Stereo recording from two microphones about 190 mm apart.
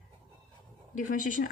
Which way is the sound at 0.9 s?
40° left (ahead or behind).